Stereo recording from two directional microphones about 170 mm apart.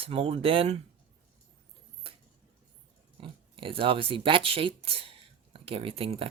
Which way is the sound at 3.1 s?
30° right (ahead or behind).